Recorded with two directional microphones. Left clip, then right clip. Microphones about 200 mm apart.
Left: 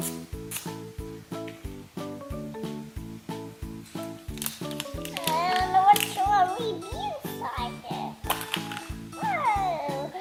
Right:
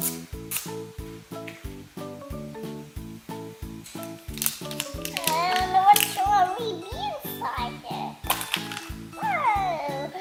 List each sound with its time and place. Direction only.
3.9 s music: 5° left (ahead or behind)